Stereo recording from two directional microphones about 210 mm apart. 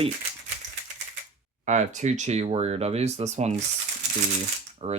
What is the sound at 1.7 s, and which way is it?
Speech, 35° right (ahead or behind).